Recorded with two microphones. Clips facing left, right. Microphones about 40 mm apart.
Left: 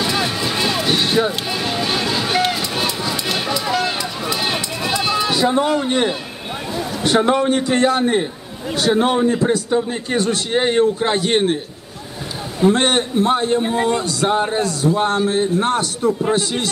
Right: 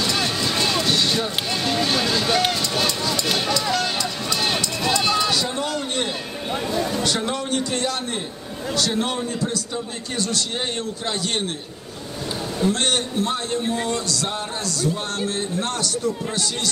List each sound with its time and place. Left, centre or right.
0.0 s a sound: centre
0.9 s vehicle: left
1.5 s speech: centre
2.7 s music: centre
7.0 s a man's voice: left
12.6 s a man's voice: left